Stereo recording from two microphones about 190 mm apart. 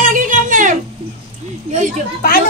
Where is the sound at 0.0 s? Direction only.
45° right (ahead or behind).